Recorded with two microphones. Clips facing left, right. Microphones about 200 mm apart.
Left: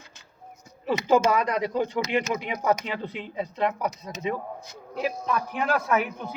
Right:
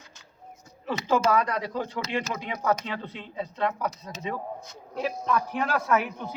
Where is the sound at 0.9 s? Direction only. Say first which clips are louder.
Left 3 dB; 15° left (ahead or behind).